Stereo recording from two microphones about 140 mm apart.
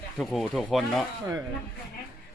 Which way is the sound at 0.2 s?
Centre (ahead or behind).